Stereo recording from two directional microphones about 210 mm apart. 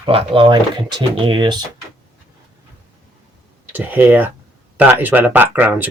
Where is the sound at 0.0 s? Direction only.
25° right (ahead or behind).